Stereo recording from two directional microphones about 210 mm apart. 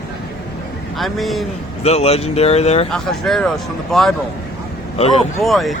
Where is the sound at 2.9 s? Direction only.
Centre (ahead or behind).